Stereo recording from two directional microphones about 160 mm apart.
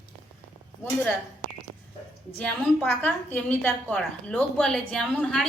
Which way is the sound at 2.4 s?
10° left (ahead or behind).